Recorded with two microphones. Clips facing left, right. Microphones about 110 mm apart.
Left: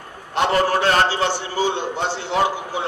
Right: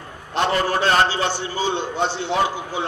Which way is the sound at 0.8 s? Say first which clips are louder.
Left 1 dB; 20° right (ahead or behind).